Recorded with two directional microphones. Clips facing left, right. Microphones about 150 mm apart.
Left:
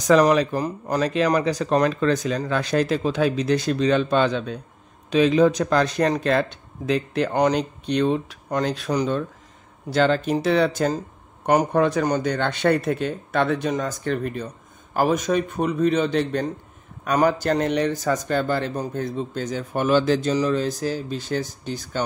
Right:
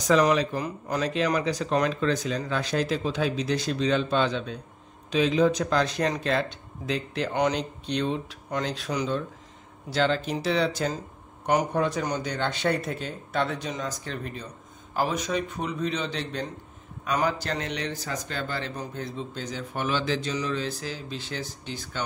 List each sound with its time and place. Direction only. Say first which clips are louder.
0.3 s speech: left 5 dB; 60° left (ahead or behind)
0.6 s speech: left 5 dB; 40° left (ahead or behind); by 7.3 s 55° left (ahead or behind)
7.3 s speech: left 4 dB; 45° left (ahead or behind)
11.4 s speech: left 5 dB; 65° left (ahead or behind); by 22.0 s 45° left (ahead or behind)